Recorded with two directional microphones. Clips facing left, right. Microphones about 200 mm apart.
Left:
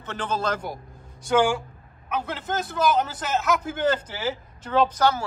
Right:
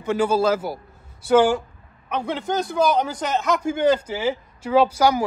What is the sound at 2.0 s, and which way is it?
A man's voice, 5° left (ahead or behind).